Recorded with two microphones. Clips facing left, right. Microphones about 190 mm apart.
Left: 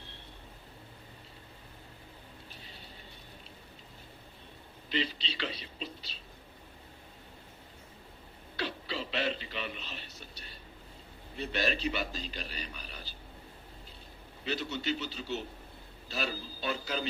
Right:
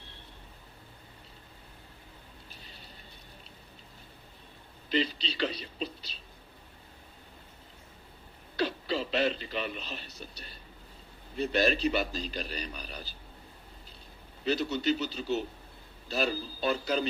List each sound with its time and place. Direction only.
4.9 s a man's voice: 40° right (ahead or behind)
8.5 s a sound: 40° right (ahead or behind)
11.3 s a man's voice: 40° right (ahead or behind)
14.4 s a man's voice: 40° right (ahead or behind)